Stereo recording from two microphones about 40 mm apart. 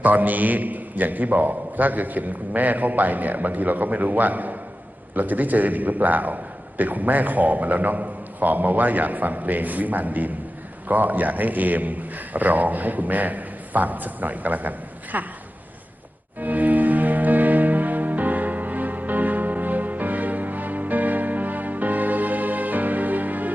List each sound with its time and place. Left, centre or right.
0.0 s a man's voice: right
16.4 s music: right